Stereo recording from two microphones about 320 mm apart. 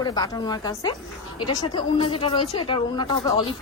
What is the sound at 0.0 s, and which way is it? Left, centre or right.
Speech, centre.